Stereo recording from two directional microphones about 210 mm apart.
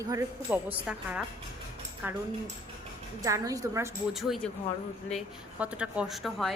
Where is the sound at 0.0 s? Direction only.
15° right (ahead or behind).